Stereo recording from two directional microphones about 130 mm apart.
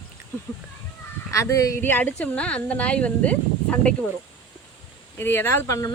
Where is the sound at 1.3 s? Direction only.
25° left (ahead or behind); by 3.9 s 10° left (ahead or behind).